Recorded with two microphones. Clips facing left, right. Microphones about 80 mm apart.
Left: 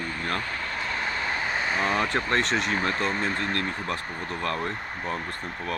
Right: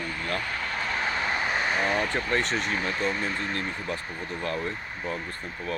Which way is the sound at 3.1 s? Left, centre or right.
Left.